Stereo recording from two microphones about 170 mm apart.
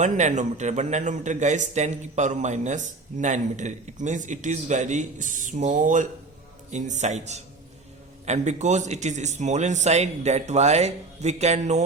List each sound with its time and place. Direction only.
0.0 s a man's voice: 45° right (ahead or behind)